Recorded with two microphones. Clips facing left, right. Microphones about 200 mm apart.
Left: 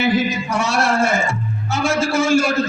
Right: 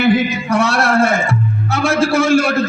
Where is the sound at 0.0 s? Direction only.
60° right (ahead or behind).